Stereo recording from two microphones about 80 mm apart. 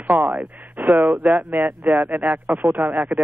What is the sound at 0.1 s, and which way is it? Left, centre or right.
Speech, right.